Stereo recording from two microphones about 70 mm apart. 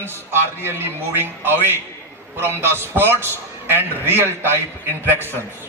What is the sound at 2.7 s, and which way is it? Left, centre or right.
A man's voice, right.